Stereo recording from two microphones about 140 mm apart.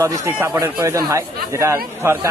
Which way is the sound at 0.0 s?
20° right (ahead or behind).